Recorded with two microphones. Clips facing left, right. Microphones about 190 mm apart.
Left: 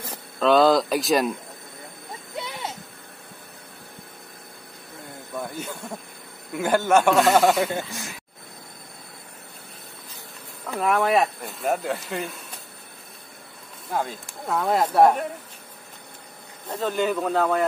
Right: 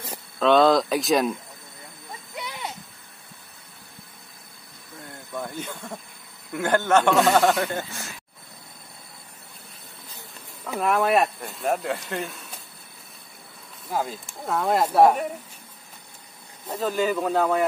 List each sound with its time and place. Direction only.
0.4 s speech: centre (ahead or behind)
2.3 s a sound: 25° left (ahead or behind)
5.4 s speech: 10° left (ahead or behind)
10.7 s speech: centre (ahead or behind)
13.8 s speech: centre (ahead or behind)
16.6 s speech: 5° right (ahead or behind)